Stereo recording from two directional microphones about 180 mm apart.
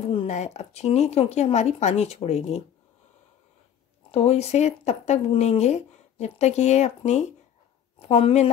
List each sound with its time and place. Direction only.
0.0 s speech: 35° left (ahead or behind)
4.1 s speech: 35° left (ahead or behind)